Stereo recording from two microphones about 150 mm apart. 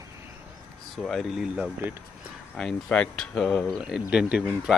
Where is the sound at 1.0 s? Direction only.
Centre (ahead or behind).